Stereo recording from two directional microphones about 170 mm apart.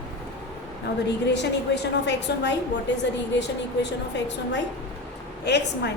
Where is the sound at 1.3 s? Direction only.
85° left.